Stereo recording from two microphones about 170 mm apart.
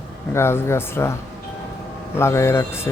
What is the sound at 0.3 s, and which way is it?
Speech, 15° left (ahead or behind).